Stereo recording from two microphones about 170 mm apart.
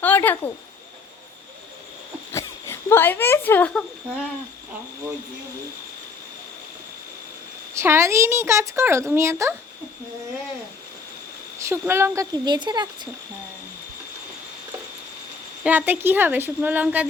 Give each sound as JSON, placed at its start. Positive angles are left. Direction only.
{"t": 0.0, "sound": "speech", "side_deg": 10}
{"t": 2.3, "sound": "a sound", "side_deg": 15}
{"t": 7.8, "sound": "a woman's voice", "side_deg": -15}
{"t": 11.6, "sound": "a woman's voice", "side_deg": -15}
{"t": 15.6, "sound": "a woman's voice", "side_deg": -10}